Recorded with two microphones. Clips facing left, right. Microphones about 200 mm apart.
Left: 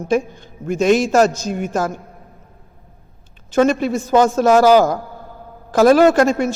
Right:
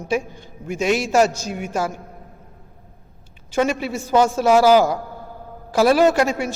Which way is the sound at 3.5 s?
10° right (ahead or behind).